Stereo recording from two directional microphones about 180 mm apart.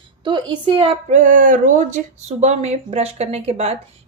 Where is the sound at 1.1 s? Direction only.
45° right (ahead or behind).